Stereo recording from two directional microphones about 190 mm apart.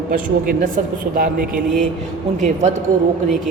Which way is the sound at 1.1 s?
45° right (ahead or behind).